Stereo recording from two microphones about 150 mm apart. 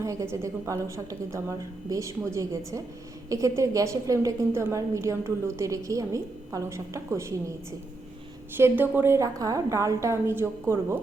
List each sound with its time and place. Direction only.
0.0 s a woman's voice: 20° right (ahead or behind)
8.5 s a woman's voice: 15° right (ahead or behind)